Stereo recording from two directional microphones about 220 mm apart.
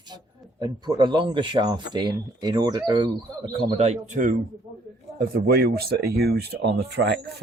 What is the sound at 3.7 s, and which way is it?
Speech, 30° right (ahead or behind).